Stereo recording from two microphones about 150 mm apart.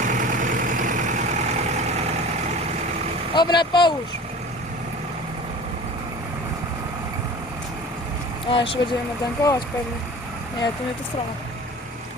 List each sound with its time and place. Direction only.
0.0 s vehicle: 60° right (ahead or behind)
3.3 s speech: 30° left (ahead or behind)
8.4 s speech: 35° left (ahead or behind)
9.4 s speech: 25° left (ahead or behind)